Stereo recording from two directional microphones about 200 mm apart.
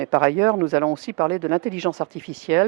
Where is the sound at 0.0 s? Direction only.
15° right (ahead or behind).